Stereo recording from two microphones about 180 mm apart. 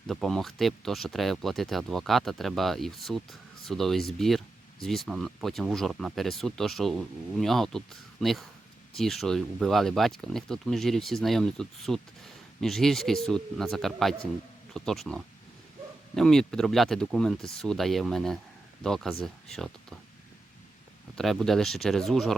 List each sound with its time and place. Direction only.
0.1 s speech: centre (ahead or behind)
21.2 s speech: centre (ahead or behind)